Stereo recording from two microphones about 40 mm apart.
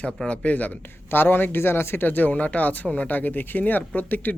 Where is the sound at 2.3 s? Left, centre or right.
Left.